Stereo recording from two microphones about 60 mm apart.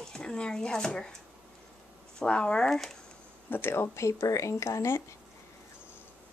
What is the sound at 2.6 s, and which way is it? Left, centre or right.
Speech, centre.